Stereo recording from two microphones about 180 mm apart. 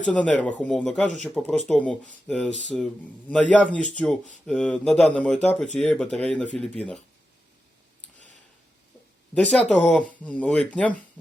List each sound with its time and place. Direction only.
0.0 s speech: 5° left (ahead or behind)
9.3 s speech: 5° left (ahead or behind)